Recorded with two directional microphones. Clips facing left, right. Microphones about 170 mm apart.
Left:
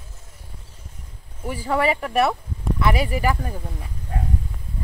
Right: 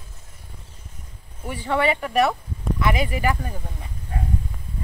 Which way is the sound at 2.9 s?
40° left (ahead or behind).